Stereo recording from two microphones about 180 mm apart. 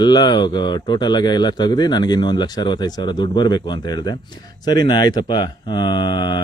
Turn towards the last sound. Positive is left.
turn(degrees=25)  # may be behind; listen again after turning